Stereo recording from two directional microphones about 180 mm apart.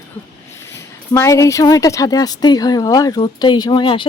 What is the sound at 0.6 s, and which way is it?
A woman's voice, 15° left (ahead or behind).